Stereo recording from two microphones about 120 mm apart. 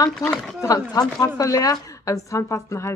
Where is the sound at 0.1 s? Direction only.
5° left (ahead or behind).